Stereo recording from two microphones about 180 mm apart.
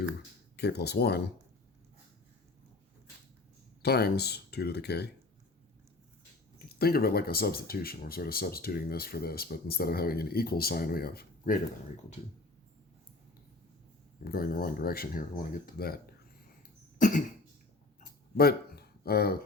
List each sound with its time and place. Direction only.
0.5 s speech: 65° left (ahead or behind)
3.8 s speech: 65° left (ahead or behind)
6.7 s speech: 60° left (ahead or behind)
14.3 s speech: 55° left (ahead or behind)
17.0 s cough: 45° left (ahead or behind)
18.0 s a sound: 60° left (ahead or behind)